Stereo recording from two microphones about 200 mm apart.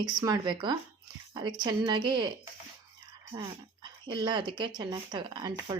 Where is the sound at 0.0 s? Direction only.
20° right (ahead or behind).